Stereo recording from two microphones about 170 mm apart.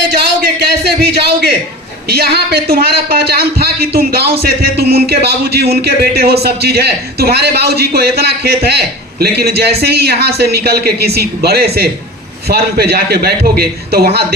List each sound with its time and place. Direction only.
0.7 s a man's voice: 70° right (ahead or behind)